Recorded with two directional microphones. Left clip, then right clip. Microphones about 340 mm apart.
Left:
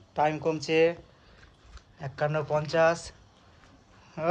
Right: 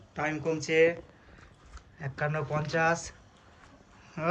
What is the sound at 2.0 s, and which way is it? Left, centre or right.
Speech, centre.